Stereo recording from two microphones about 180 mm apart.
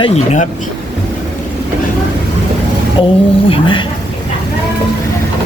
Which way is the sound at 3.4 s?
30° left (ahead or behind).